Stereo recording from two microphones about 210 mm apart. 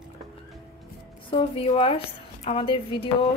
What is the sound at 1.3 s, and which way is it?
A woman's voice, 25° left (ahead or behind).